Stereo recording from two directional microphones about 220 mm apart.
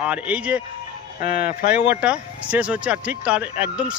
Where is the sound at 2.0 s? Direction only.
5° right (ahead or behind).